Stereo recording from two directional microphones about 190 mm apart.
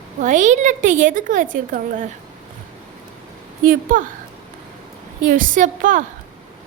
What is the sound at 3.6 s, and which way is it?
Speech, 45° right (ahead or behind).